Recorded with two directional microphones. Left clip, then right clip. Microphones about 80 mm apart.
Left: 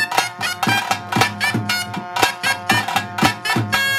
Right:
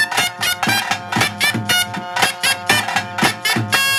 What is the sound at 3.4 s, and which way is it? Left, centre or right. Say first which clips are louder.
Music: right 2 dB; right.